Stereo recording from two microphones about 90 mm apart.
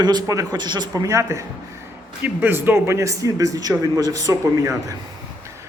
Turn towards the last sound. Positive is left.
turn(degrees=-40)  # may be behind; listen again after turning